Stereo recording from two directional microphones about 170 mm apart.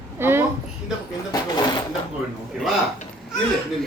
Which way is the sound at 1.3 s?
25° left (ahead or behind).